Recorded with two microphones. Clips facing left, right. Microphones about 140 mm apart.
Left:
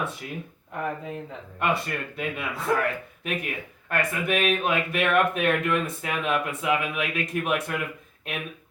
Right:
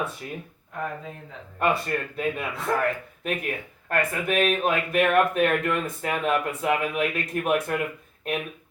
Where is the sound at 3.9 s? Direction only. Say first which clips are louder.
Right 2 dB; 40° right (ahead or behind).